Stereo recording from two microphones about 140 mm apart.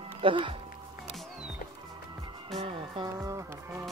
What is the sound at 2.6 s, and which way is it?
Music, 40° right (ahead or behind).